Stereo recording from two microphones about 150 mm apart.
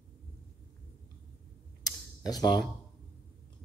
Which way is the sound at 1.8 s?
25° left (ahead or behind).